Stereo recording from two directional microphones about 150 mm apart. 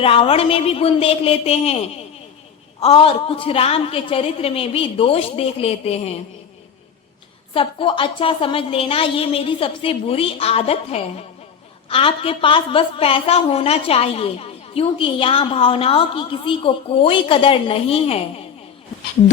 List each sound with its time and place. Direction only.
0.0 s a woman's voice: 40° left (ahead or behind)
2.8 s a woman's voice: 40° left (ahead or behind)
7.5 s a woman's voice: 35° left (ahead or behind)